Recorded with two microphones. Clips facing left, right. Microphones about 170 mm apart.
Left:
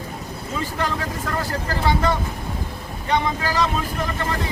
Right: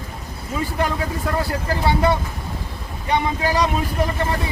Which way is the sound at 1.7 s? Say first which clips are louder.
Right 2 dB; 15° right (ahead or behind).